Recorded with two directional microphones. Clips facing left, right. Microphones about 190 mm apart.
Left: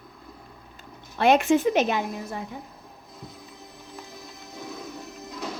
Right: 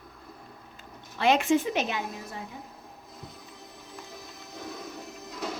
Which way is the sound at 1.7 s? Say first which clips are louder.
Left 6 dB; 45° left (ahead or behind).